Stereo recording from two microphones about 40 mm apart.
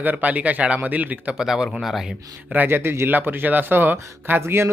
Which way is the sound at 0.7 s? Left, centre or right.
Right.